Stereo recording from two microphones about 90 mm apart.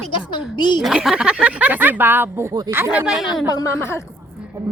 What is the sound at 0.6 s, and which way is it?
Speech, 60° left (ahead or behind).